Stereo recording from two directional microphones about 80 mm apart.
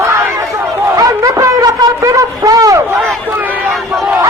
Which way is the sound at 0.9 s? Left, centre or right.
Right.